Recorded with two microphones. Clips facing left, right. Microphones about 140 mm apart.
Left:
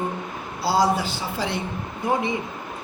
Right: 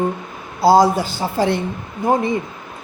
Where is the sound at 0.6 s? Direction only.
45° right (ahead or behind).